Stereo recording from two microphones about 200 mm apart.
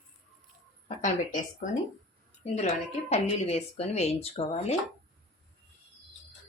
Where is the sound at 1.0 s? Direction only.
40° left (ahead or behind).